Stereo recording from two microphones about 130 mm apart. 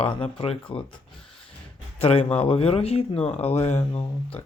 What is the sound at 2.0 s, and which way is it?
A man's voice, 50° left (ahead or behind).